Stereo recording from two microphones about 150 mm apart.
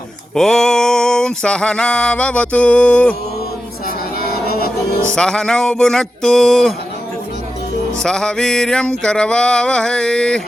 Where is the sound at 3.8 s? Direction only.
75° left (ahead or behind).